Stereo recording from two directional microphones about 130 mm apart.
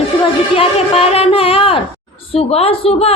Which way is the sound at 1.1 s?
50° left (ahead or behind).